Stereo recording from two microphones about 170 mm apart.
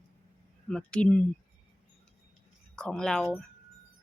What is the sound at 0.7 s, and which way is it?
Speech, 5° left (ahead or behind).